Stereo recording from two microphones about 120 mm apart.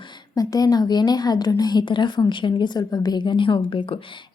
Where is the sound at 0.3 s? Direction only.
30° left (ahead or behind).